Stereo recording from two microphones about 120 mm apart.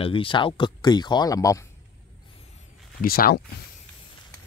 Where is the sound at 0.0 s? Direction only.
45° left (ahead or behind); by 1.6 s 30° left (ahead or behind).